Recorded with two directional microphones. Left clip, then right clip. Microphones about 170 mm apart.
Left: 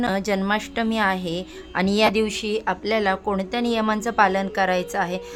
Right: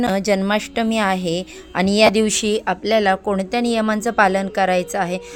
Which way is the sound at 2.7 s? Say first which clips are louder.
Right 5 dB; 15° right (ahead or behind).